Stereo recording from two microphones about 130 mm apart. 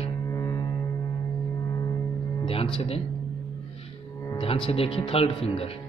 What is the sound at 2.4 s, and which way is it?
Music, 45° left (ahead or behind).